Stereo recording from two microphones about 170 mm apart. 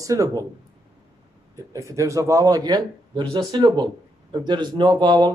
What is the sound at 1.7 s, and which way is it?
Speech, 20° right (ahead or behind).